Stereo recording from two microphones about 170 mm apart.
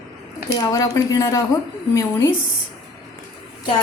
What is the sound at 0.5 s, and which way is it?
Speech, 20° left (ahead or behind).